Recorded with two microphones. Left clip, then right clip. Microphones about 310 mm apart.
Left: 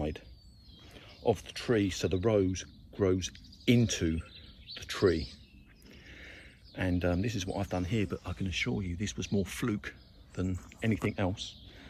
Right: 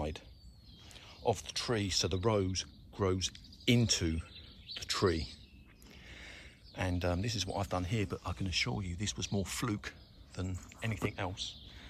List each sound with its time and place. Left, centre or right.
0.9 s speech: centre
4.0 s speech: right
4.7 s speech: centre
5.9 s a sound: centre
7.0 s speech: centre
11.1 s a man's voice: centre